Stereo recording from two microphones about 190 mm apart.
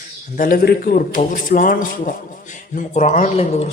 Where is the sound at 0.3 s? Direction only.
45° left (ahead or behind).